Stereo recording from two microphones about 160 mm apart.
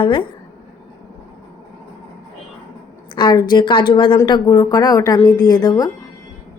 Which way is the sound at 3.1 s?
30° left (ahead or behind).